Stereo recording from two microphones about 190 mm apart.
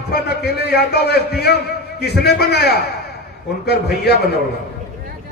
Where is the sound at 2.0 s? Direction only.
60° left (ahead or behind).